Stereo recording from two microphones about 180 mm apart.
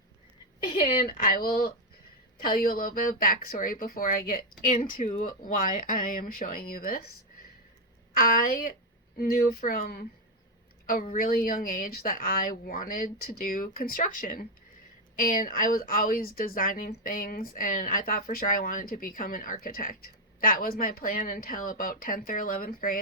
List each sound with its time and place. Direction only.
0.7 s a sound: 30° left (ahead or behind)
1.1 s speech: 50° left (ahead or behind)
8.1 s speech: 55° left (ahead or behind)